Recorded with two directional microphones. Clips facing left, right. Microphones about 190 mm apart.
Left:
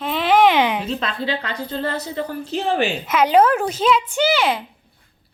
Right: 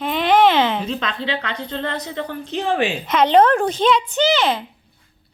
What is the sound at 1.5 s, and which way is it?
A woman's voice, 10° left (ahead or behind).